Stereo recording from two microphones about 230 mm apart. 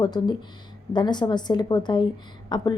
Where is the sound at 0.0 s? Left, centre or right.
Centre.